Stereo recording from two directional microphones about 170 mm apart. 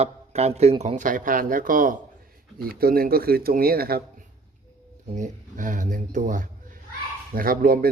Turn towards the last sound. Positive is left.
turn(degrees=-60)  # may be behind; listen again after turning